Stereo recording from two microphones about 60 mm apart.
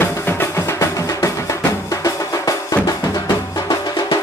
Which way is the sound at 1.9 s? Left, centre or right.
Left.